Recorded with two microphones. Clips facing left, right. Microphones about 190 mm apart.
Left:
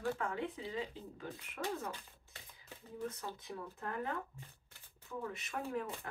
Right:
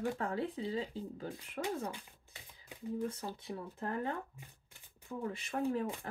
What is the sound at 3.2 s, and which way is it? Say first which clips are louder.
Speech: right 3 dB; 30° right (ahead or behind).